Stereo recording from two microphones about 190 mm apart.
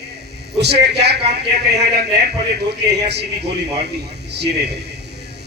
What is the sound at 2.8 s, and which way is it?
Speech, 60° right (ahead or behind).